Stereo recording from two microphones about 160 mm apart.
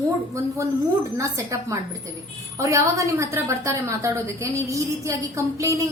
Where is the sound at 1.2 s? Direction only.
20° right (ahead or behind).